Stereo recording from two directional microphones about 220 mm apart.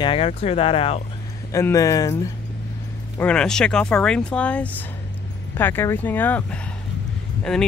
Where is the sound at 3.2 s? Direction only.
5° left (ahead or behind).